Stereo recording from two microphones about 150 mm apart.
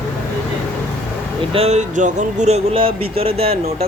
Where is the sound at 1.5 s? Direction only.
45° right (ahead or behind).